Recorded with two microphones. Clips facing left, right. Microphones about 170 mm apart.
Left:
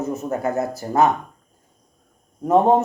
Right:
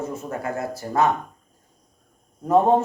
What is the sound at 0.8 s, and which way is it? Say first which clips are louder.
Speech: left 3 dB; 30° left (ahead or behind).